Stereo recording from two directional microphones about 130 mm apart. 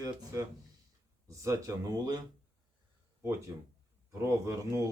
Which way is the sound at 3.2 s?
20° right (ahead or behind).